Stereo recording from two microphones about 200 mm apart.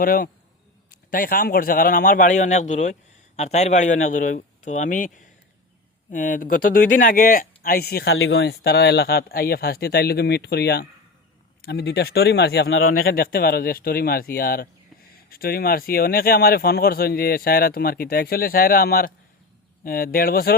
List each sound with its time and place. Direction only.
0.0 s speech: 45° left (ahead or behind)
8.1 s speech: 85° left
8.4 s speech: 55° left (ahead or behind)